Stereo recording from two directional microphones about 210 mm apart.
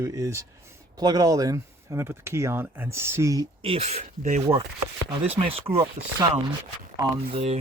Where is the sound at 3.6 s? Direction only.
30° right (ahead or behind).